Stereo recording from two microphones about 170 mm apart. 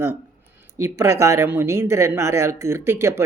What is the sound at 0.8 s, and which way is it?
Speech, 15° right (ahead or behind).